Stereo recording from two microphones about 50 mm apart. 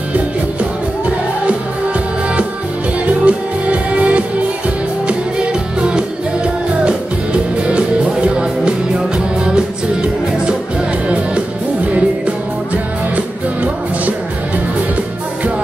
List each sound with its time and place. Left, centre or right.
3.1 s music: right